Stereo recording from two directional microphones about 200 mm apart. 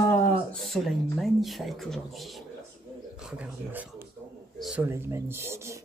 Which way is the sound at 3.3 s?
5° right (ahead or behind).